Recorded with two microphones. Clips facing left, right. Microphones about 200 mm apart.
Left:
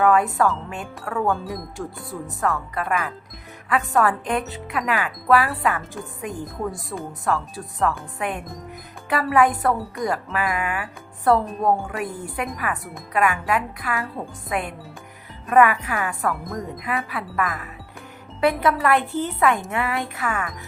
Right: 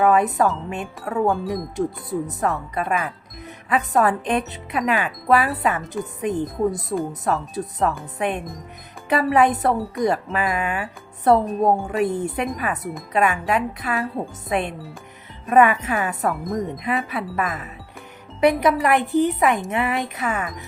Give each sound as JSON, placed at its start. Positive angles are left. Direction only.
{"t": 0.0, "sound": "speech", "side_deg": -20}
{"t": 1.3, "sound": "speech", "side_deg": 0}
{"t": 1.7, "sound": "speech", "side_deg": -20}
{"t": 10.0, "sound": "speech", "side_deg": 0}
{"t": 10.3, "sound": "speech", "side_deg": -25}